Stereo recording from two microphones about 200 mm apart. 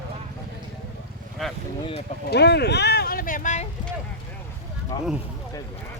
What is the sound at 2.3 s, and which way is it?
Speech, 55° left (ahead or behind).